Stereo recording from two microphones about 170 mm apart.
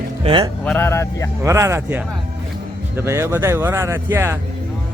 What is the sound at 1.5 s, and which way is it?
Speech, 15° right (ahead or behind).